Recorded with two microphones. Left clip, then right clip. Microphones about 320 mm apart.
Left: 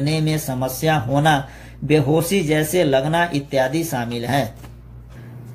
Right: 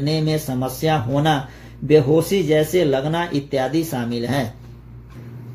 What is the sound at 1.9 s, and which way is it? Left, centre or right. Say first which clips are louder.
Speech: right 2 dB; left.